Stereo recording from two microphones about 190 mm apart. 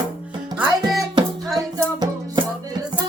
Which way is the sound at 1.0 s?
25° right (ahead or behind).